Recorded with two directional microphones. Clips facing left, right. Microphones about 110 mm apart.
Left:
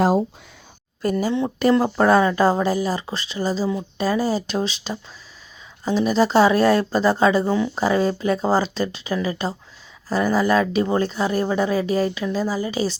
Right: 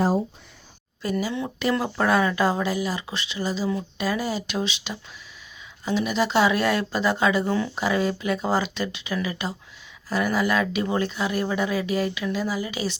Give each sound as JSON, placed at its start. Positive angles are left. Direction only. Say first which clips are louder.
{"t": 0.0, "sound": "a sound", "louder": "left 4 dB", "side_deg": 90}
{"t": 1.0, "sound": "speech", "louder": "left 5 dB", "side_deg": 50}
{"t": 1.8, "sound": "speech", "louder": "left 3 dB", "side_deg": 35}